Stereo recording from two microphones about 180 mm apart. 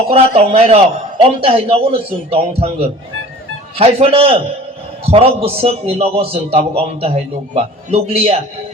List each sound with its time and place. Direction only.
0.1 s a man's voice: 30° right (ahead or behind)